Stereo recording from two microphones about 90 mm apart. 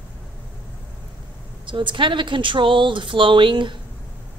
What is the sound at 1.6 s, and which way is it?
Speech, 65° right (ahead or behind).